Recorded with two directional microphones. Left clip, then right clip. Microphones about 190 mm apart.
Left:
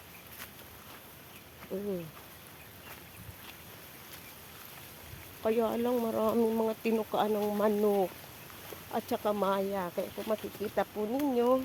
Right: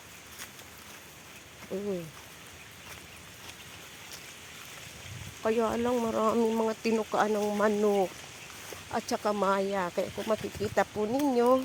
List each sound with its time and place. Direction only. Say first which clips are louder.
1.7 s speech: right 2 dB; 10° right (ahead or behind)
5.4 s speech: right 2 dB; 5° right (ahead or behind); by 11.6 s 25° right (ahead or behind)